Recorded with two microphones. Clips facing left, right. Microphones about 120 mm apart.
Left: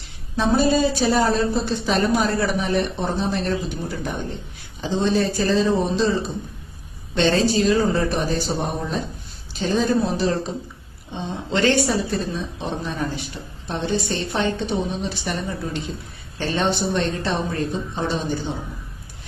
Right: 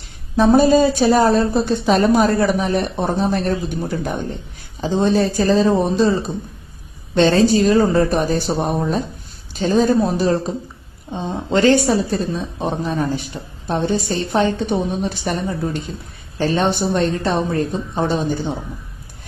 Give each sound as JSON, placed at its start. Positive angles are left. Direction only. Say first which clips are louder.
{"t": 0.3, "sound": "a woman's voice", "louder": "right 6 dB", "side_deg": -45}